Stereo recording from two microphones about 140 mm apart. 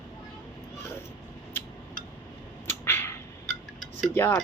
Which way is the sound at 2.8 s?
15° left (ahead or behind).